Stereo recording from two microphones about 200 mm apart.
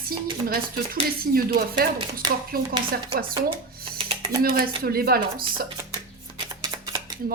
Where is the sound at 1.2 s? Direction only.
45° right (ahead or behind).